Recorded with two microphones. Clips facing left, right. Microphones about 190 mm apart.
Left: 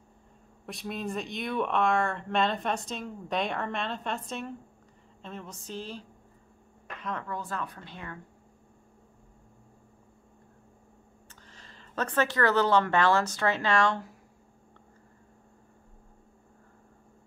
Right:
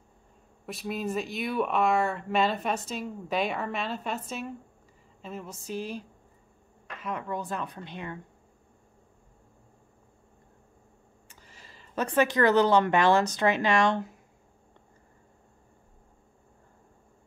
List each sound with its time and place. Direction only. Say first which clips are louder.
0.7 s a woman's voice: right 3 dB; 5° right (ahead or behind); by 8.2 s 20° right (ahead or behind)
11.2 s speech: even; 10° right (ahead or behind)